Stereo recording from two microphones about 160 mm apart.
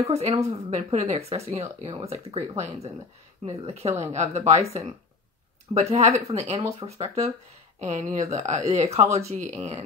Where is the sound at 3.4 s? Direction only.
40° right (ahead or behind).